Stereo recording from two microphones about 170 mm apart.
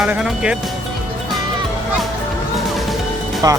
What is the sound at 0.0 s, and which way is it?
Music, 5° right (ahead or behind).